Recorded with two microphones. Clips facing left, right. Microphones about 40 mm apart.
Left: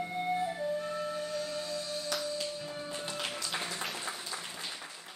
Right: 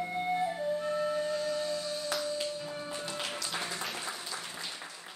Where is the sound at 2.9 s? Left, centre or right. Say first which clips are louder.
Left 1 dB; right.